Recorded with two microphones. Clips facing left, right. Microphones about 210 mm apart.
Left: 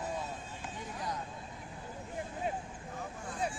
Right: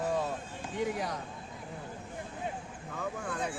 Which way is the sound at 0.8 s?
80° right.